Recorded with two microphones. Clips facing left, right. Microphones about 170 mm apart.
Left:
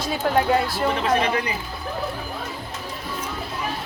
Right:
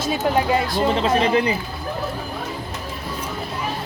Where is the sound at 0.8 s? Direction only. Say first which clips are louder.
Right 3 dB; 25° right (ahead or behind).